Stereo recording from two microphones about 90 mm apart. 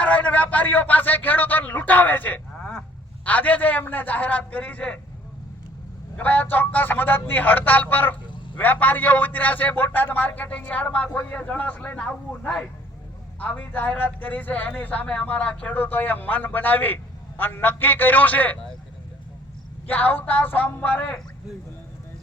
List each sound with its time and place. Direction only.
0.0 s a man's voice: 15° left (ahead or behind)
6.1 s a man's voice: 20° left (ahead or behind)
19.9 s a man's voice: 20° left (ahead or behind)